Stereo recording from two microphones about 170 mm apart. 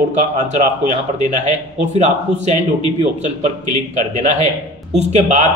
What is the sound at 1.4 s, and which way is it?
A man's voice, 45° right (ahead or behind).